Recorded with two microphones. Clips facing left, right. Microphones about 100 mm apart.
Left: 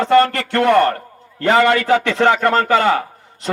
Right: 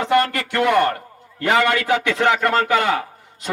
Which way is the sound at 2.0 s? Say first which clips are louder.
Left 3 dB; 5° right (ahead or behind).